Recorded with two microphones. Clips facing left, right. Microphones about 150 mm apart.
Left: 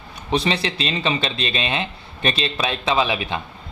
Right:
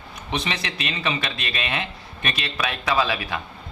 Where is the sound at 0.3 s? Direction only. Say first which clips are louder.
Left 7 dB; 30° left (ahead or behind).